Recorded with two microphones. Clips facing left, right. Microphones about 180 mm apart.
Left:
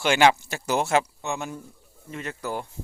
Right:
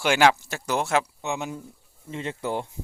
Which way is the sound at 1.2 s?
15° right (ahead or behind).